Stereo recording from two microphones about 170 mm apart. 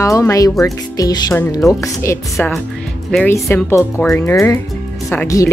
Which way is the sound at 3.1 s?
5° left (ahead or behind).